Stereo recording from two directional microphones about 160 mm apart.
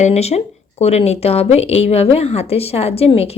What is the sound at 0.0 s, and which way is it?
Speech, 40° left (ahead or behind).